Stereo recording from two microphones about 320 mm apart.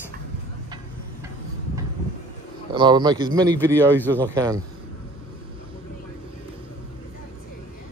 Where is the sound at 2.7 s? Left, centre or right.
Centre.